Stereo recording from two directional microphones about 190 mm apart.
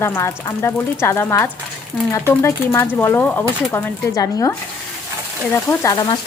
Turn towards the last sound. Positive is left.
turn(degrees=20)  # may be behind; listen again after turning